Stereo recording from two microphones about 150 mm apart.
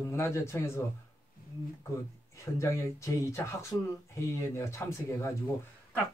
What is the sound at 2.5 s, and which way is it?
A man's voice, 20° left (ahead or behind).